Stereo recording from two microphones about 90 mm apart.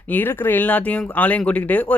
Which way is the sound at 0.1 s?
20° left (ahead or behind).